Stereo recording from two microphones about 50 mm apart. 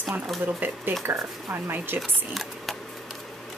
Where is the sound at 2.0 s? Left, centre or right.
Centre.